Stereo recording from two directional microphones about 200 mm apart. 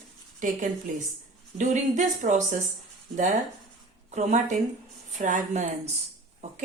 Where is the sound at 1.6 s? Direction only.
40° right (ahead or behind).